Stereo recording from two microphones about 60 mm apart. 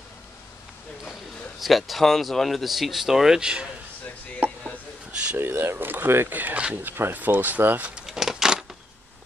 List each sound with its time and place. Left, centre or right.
1.6 s speech: centre
5.3 s speech: right
7.9 s keys jangling: centre